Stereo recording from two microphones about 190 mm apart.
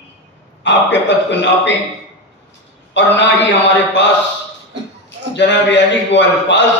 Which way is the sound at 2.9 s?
70° left (ahead or behind).